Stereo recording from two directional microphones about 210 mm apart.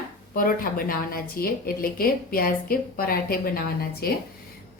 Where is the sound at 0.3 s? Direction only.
45° left (ahead or behind).